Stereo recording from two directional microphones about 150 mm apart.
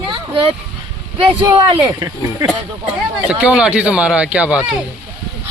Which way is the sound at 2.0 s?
20° right (ahead or behind).